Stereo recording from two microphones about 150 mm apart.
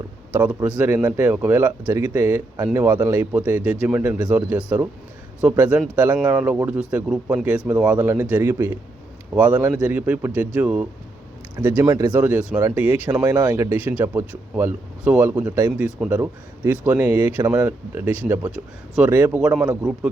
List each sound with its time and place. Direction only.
0.3 s speech: 10° right (ahead or behind)
11.9 s speech: 25° right (ahead or behind)
12.1 s speech: 10° right (ahead or behind)